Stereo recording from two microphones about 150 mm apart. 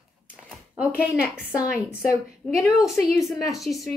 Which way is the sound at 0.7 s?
10° right (ahead or behind).